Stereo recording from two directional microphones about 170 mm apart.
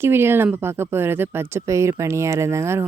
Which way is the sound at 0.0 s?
15° right (ahead or behind).